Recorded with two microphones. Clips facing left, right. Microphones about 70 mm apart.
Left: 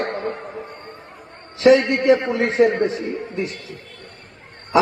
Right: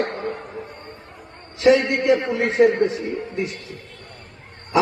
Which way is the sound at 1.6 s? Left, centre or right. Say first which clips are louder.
Left 2 dB; left.